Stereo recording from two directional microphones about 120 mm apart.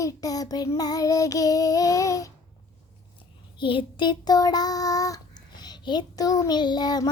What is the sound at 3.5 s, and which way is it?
Child singing, 45° left (ahead or behind).